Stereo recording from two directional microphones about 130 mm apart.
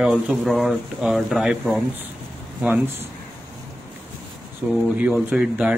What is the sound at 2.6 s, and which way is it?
Speech, 15° right (ahead or behind).